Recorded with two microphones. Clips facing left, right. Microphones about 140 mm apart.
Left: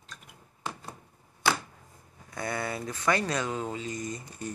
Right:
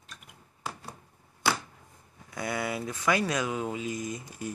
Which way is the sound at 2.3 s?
5° right (ahead or behind).